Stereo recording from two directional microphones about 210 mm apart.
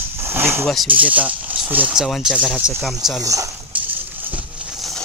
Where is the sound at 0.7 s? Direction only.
5° right (ahead or behind).